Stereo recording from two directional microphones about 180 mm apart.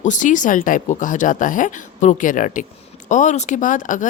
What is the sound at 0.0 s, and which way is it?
Speech, 45° left (ahead or behind).